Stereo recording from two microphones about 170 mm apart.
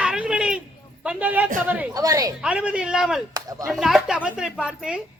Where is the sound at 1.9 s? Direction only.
20° right (ahead or behind).